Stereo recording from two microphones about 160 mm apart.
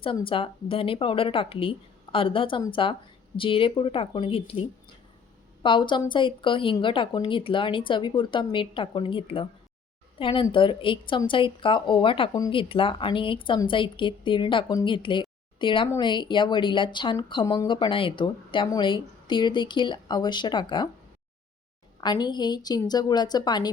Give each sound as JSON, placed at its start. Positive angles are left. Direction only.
{"t": 0.3, "sound": "speech", "side_deg": 35}
{"t": 5.6, "sound": "a woman's voice", "side_deg": 30}
{"t": 17.4, "sound": "speech", "side_deg": 20}
{"t": 17.7, "sound": "speech", "side_deg": 30}
{"t": 22.0, "sound": "speech", "side_deg": 25}